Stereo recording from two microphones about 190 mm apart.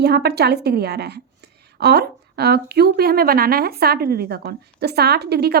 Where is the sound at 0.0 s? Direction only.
60° right (ahead or behind).